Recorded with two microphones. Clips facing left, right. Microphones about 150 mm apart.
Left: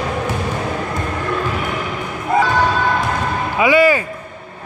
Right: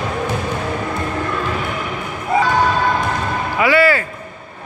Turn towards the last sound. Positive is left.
turn(degrees=15)  # may be behind; listen again after turning